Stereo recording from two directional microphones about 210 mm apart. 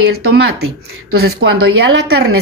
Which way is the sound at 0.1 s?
50° right (ahead or behind).